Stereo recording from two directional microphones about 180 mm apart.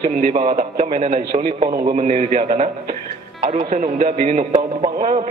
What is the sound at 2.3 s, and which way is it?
A man's voice, 45° right (ahead or behind).